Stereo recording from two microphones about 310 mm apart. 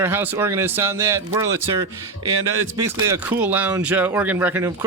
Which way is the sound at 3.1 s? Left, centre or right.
Centre.